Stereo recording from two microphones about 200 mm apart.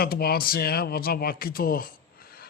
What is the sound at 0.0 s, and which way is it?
Speech, 50° left (ahead or behind).